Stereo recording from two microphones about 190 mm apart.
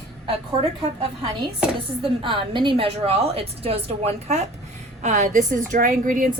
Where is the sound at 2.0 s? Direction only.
25° right (ahead or behind); by 6.3 s 45° right (ahead or behind).